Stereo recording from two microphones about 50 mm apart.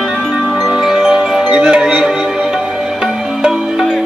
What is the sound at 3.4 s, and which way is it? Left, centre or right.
Music, centre.